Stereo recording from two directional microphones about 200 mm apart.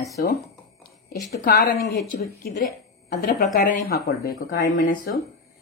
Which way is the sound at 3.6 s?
50° left (ahead or behind).